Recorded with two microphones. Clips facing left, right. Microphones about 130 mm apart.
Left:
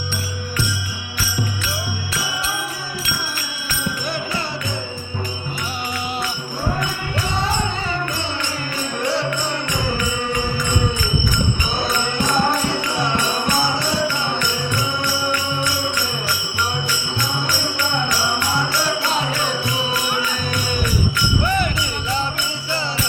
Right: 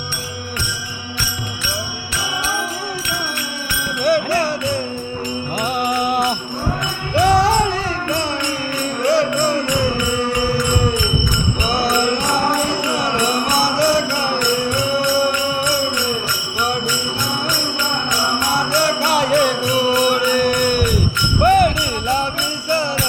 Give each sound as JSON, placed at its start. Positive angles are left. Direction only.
{"t": 4.0, "sound": "music", "side_deg": -65}
{"t": 6.0, "sound": "music", "side_deg": -55}
{"t": 7.3, "sound": "music", "side_deg": -75}
{"t": 9.0, "sound": "music", "side_deg": -65}
{"t": 13.0, "sound": "music", "side_deg": -65}
{"t": 18.9, "sound": "music", "side_deg": -65}
{"t": 21.4, "sound": "jingle bell", "side_deg": -55}